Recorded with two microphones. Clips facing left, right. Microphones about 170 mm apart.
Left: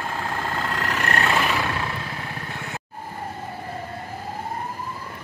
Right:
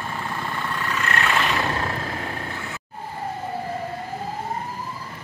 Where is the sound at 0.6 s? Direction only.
90° left; by 1.1 s 70° left (ahead or behind).